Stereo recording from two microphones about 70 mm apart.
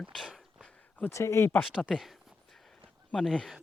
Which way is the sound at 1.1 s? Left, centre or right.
Left.